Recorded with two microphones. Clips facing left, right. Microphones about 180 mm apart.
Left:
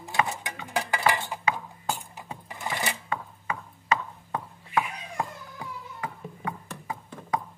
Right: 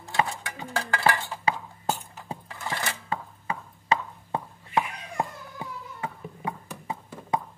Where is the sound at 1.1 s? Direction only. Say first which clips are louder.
Right 1 dB; 15° left (ahead or behind).